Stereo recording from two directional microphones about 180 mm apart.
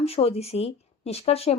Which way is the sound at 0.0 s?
35° left (ahead or behind).